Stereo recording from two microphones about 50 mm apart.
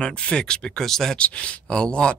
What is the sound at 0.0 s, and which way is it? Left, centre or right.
Speech, centre.